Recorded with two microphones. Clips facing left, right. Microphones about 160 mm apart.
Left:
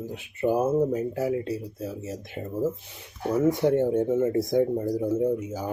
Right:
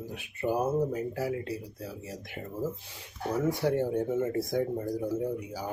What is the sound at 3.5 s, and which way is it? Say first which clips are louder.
Speech: left 6 dB; 20° left (ahead or behind).